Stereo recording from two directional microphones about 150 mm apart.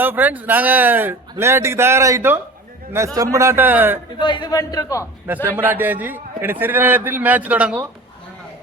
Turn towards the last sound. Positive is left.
turn(degrees=-10)  # may be behind; listen again after turning